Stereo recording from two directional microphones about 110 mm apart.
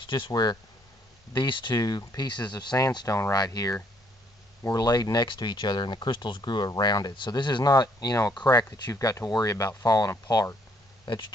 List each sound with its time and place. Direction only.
0.0 s speech: 40° left (ahead or behind)
11.1 s speech: 45° left (ahead or behind)